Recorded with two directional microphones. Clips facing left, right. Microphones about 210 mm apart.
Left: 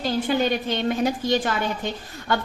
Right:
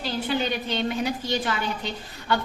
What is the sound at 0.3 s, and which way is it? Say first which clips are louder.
A woman's voice: left 2 dB; 50° left (ahead or behind).